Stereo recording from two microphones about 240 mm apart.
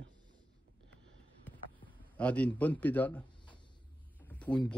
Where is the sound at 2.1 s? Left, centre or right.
Centre.